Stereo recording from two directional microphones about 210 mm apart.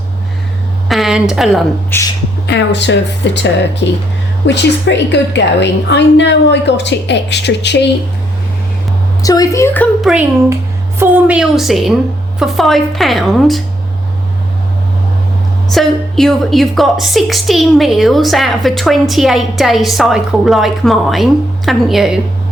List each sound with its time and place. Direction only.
0.9 s a sound: centre (ahead or behind)
1.9 s a woman's voice: 10° left (ahead or behind)
2.5 s a woman's voice: 55° left (ahead or behind)
9.2 s a woman's voice: 15° left (ahead or behind); by 13.6 s centre (ahead or behind)
15.7 s a woman's voice: centre (ahead or behind)